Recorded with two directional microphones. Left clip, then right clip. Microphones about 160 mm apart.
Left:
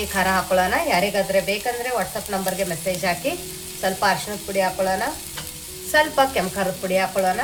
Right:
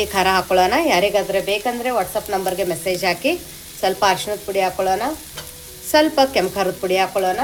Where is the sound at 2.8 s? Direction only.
55° right (ahead or behind).